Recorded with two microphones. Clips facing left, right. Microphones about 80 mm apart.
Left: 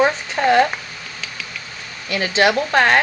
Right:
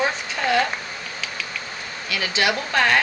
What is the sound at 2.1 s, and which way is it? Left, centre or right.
Speech, left.